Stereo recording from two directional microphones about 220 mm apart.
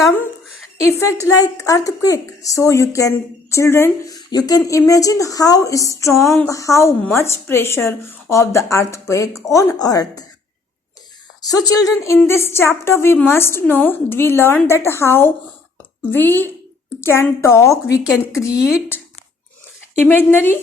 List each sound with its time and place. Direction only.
0.8 s a woman's voice: 10° left (ahead or behind)
11.4 s a woman's voice: 15° left (ahead or behind)
20.1 s a woman's voice: 10° left (ahead or behind)